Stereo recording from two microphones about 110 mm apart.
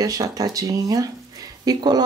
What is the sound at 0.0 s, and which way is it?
Speech, 35° right (ahead or behind).